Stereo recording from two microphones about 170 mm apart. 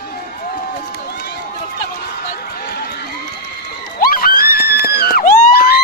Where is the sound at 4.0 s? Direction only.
60° left (ahead or behind).